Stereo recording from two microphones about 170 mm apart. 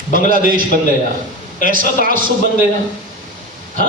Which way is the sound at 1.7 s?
55° right (ahead or behind).